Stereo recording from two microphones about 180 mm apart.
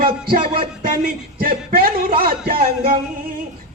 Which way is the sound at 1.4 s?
55° right (ahead or behind).